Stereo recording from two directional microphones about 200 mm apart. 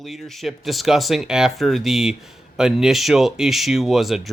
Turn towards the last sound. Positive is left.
turn(degrees=0)  # may be behind; listen again after turning